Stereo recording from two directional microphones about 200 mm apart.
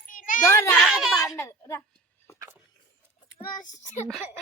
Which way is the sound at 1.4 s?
15° left (ahead or behind).